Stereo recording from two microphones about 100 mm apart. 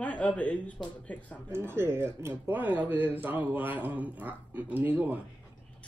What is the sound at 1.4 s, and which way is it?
A man's voice, 25° right (ahead or behind).